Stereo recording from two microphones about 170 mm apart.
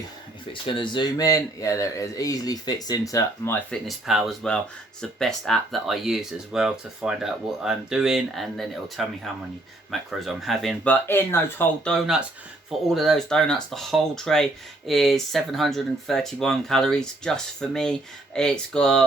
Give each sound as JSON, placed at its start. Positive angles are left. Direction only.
{"t": 0.6, "sound": "speech", "side_deg": 30}
{"t": 3.8, "sound": "speech", "side_deg": 0}
{"t": 12.7, "sound": "speech", "side_deg": 0}